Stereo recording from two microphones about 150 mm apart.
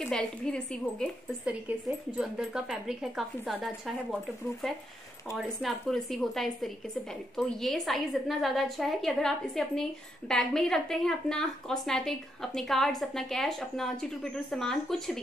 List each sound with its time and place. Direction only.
0.0 s a woman's voice: 5° left (ahead or behind)
2.1 s a woman's voice: 5° right (ahead or behind)